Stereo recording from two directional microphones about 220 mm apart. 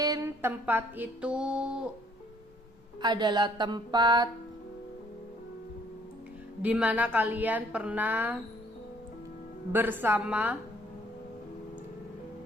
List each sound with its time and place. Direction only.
0.0 s music: 15° right (ahead or behind)
3.0 s a woman's voice: 20° right (ahead or behind)
6.6 s a woman's voice: 5° right (ahead or behind)
9.7 s a woman's voice: 10° right (ahead or behind)